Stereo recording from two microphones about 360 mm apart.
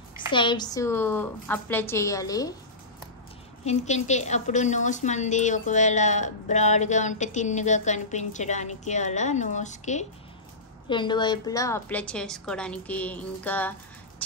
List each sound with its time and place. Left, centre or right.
0.3 s a woman's voice: centre
3.6 s a woman's voice: centre